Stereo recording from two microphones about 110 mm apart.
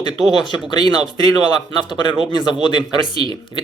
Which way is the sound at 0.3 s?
40° left (ahead or behind).